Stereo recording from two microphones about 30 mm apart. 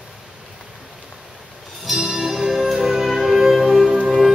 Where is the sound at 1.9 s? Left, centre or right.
Centre.